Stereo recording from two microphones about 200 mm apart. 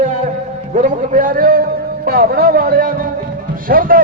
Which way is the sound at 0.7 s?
40° right (ahead or behind).